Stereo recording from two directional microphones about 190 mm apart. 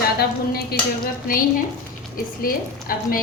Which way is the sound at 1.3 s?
50° left (ahead or behind).